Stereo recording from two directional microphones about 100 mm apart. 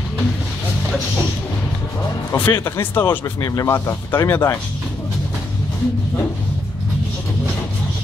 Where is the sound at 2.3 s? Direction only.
30° left (ahead or behind).